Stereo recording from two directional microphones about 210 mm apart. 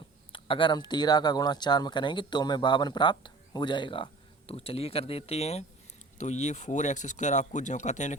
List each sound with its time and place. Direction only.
0.3 s speech: 25° left (ahead or behind)